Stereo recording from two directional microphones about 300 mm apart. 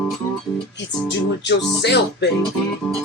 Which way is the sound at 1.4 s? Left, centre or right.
Left.